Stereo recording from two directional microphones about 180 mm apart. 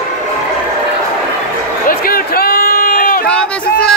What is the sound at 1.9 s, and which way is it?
Run, 55° left (ahead or behind).